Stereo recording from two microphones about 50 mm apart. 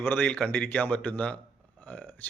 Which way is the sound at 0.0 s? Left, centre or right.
Left.